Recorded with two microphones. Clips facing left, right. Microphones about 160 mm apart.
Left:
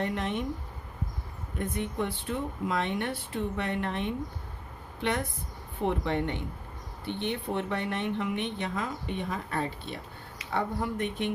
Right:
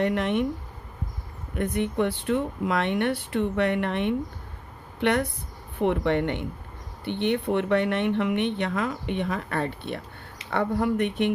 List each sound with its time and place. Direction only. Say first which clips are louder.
0.0 s speech: right 7 dB; 65° right (ahead or behind)
1.5 s a woman's voice: right 6 dB; 70° right (ahead or behind)